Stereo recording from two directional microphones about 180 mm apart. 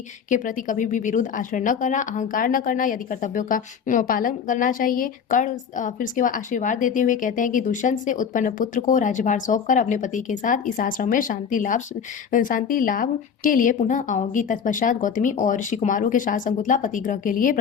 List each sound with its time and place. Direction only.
0.3 s speech: 45° left (ahead or behind)